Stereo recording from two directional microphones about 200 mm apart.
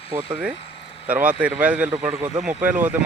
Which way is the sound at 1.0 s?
10° right (ahead or behind).